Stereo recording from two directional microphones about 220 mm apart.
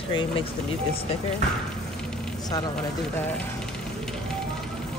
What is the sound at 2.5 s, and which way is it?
Speech, 15° left (ahead or behind).